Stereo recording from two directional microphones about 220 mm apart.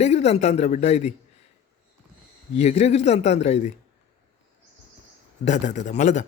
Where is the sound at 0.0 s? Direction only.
30° left (ahead or behind).